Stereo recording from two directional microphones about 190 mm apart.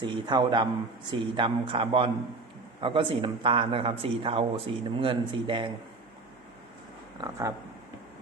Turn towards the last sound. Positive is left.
turn(degrees=-15)  # may be behind; listen again after turning